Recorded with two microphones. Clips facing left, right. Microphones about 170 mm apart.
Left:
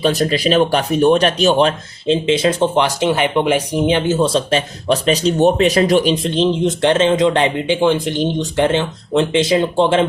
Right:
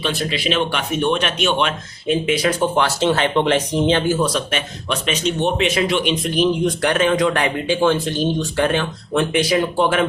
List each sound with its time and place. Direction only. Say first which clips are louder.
0.0 s speech: left 7 dB; 40° left (ahead or behind)